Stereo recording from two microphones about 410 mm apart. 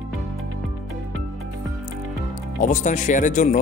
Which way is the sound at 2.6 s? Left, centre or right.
Centre.